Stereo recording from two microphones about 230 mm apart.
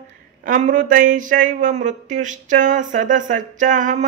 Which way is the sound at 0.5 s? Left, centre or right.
Right.